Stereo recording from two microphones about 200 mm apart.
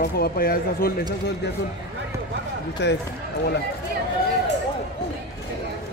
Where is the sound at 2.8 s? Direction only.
60° left (ahead or behind).